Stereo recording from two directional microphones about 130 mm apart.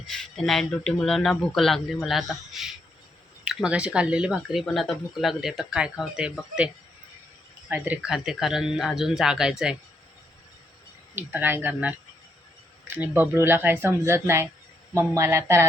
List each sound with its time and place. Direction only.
0.1 s speech: 5° left (ahead or behind)
7.7 s speech: 10° right (ahead or behind)
11.1 s speech: 15° right (ahead or behind)